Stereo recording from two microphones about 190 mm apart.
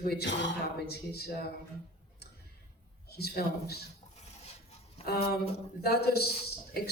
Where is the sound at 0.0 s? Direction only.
55° left (ahead or behind).